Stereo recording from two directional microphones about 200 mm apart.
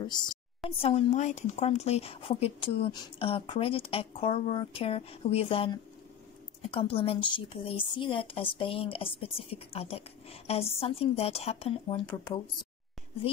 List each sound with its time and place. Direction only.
0.2 s a woman's voice: 20° left (ahead or behind)